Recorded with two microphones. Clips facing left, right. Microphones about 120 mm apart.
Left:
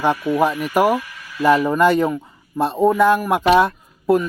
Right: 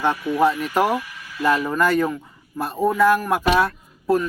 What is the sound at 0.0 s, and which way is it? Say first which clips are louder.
A man's voice: left 1 dB; 15° left (ahead or behind).